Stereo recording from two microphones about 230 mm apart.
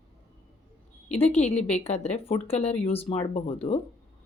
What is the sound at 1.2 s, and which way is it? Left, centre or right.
Speech, left.